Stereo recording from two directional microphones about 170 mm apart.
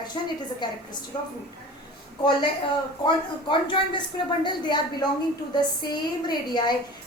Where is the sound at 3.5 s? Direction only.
30° left (ahead or behind).